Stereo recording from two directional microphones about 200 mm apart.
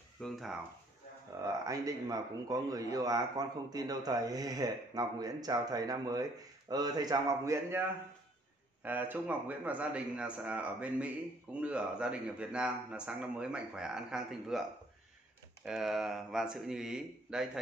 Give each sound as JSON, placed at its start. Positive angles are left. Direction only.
{"t": 0.2, "sound": "a man's voice", "side_deg": 0}
{"t": 1.7, "sound": "a man's voice", "side_deg": -15}
{"t": 8.8, "sound": "a man's voice", "side_deg": -10}
{"t": 15.6, "sound": "a man's voice", "side_deg": 0}